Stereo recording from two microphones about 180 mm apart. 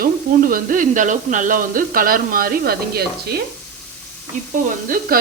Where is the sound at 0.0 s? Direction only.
50° right (ahead or behind).